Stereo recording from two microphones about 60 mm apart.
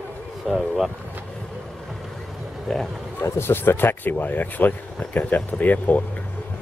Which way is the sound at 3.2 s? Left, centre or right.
Left.